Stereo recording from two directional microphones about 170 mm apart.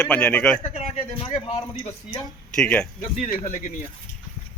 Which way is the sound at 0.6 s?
40° left (ahead or behind).